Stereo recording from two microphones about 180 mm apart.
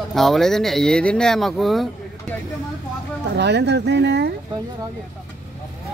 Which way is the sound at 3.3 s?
70° right (ahead or behind).